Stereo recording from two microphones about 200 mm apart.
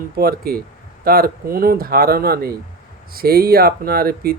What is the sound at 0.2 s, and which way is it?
Speech, 50° right (ahead or behind).